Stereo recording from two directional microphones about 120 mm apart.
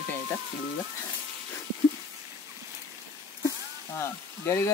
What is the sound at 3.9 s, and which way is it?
Speech, 20° left (ahead or behind).